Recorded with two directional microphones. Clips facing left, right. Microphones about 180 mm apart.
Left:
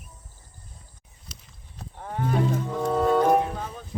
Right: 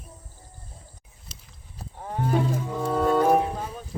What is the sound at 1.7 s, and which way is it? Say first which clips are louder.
Wild animals: right 1 dB; 10° right (ahead or behind).